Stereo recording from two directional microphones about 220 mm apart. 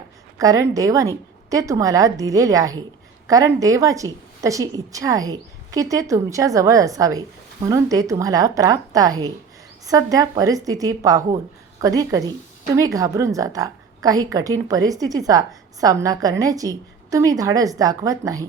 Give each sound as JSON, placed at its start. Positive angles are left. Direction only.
{"t": 0.3, "sound": "a woman's voice", "side_deg": -15}